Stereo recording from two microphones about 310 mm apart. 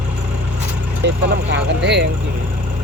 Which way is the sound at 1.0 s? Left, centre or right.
Right.